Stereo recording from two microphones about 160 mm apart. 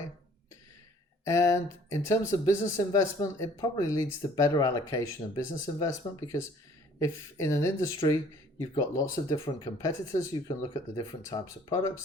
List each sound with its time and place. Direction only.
1.2 s speech: 20° left (ahead or behind)